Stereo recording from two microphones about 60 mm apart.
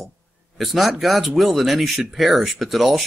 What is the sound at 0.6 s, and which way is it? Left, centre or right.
Speech, centre.